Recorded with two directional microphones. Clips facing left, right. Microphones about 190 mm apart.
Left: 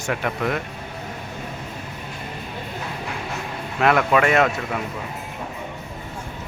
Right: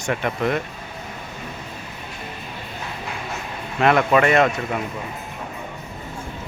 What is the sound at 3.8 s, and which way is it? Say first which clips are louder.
Speech: right 1 dB; centre (ahead or behind).